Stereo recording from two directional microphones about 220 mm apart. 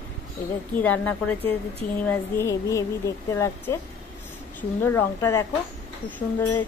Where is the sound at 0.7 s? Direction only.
5° left (ahead or behind).